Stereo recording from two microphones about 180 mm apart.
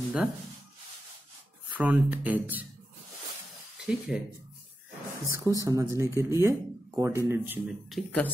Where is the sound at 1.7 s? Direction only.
10° right (ahead or behind).